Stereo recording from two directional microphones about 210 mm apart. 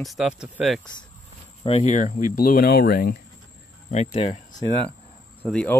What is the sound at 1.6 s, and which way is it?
Speech, 30° left (ahead or behind).